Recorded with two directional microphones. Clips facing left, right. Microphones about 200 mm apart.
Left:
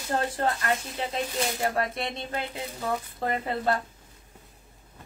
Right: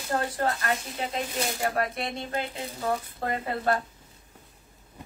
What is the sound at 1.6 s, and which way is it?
Speech, 25° left (ahead or behind).